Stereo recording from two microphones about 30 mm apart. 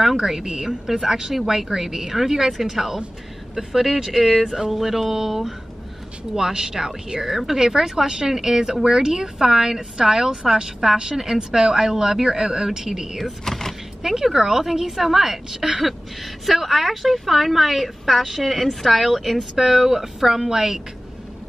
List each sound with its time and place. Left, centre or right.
0.2 s a woman's voice: centre
13.5 s a sound: centre
14.0 s a woman's voice: centre
15.8 s a woman's voice: centre